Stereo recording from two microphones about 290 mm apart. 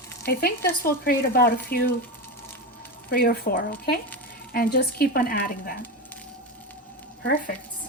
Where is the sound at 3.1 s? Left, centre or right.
Left.